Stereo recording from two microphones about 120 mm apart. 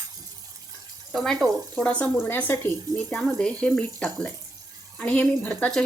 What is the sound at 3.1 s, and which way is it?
Speech, 5° left (ahead or behind).